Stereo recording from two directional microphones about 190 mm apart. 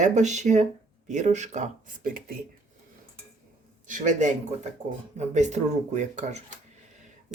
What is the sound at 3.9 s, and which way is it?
Speech, 40° right (ahead or behind).